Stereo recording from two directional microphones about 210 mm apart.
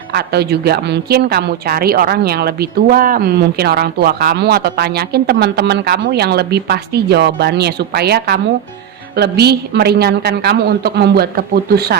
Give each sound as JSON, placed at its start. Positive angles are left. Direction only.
{"t": 0.1, "sound": "a woman's voice", "side_deg": -50}